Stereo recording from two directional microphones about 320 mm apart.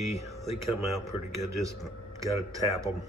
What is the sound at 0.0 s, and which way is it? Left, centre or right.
Speech, left.